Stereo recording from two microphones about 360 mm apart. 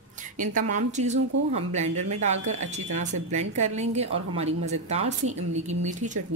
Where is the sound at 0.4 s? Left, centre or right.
Right.